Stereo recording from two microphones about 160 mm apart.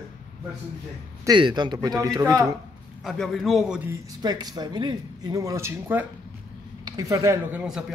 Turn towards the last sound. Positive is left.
turn(degrees=-5)  # may be behind; listen again after turning